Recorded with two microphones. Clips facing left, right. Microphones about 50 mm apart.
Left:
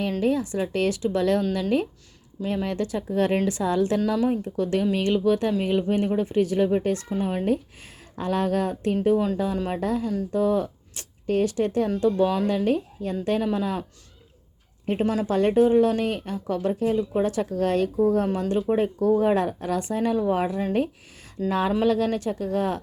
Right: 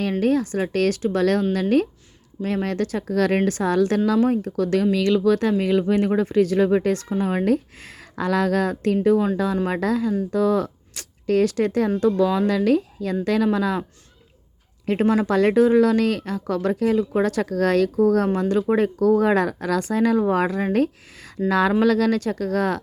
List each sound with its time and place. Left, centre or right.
0.0 s a woman's voice: right
2.4 s a woman's voice: right
7.1 s speech: right
11.9 s speech: right
12.5 s speech: right
14.8 s a woman's voice: right
18.3 s a woman's voice: right
18.7 s speech: right
20.7 s speech: right
21.5 s speech: right